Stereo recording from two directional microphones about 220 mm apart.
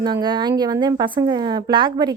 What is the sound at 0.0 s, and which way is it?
A woman's voice, 20° right (ahead or behind).